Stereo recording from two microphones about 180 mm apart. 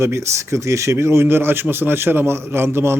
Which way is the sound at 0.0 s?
15° right (ahead or behind).